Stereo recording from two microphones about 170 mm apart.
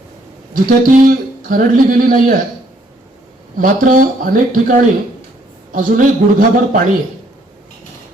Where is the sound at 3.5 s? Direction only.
50° right (ahead or behind).